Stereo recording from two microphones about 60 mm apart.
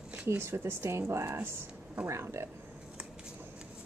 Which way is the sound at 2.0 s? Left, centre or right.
Right.